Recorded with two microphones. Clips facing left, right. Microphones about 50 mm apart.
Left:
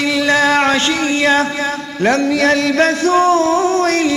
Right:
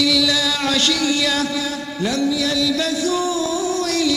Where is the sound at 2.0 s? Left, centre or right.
Left.